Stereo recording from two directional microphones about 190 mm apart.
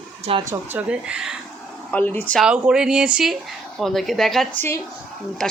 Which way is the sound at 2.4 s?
5° right (ahead or behind).